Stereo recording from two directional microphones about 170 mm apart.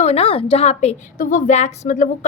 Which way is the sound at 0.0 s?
35° left (ahead or behind).